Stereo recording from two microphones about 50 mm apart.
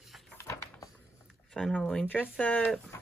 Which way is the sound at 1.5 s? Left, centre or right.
Centre.